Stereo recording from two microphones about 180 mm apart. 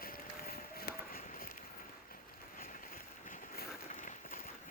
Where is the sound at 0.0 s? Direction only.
55° left (ahead or behind).